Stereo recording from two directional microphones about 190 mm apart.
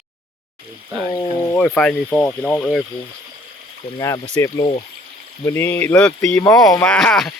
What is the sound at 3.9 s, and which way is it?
Speech, 20° left (ahead or behind).